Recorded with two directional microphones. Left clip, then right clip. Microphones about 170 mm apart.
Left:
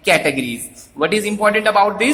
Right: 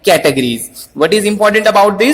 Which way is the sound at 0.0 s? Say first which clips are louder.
Right 5 dB; 35° right (ahead or behind).